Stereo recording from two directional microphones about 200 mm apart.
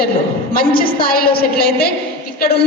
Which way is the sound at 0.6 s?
45° left (ahead or behind).